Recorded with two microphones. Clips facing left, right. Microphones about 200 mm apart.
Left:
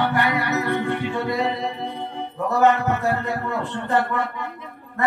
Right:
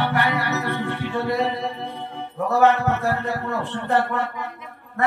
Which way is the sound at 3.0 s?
15° left (ahead or behind).